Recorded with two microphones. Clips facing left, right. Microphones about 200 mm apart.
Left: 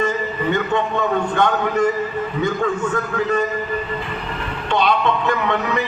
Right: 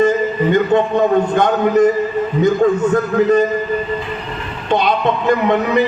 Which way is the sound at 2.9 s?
40° right (ahead or behind).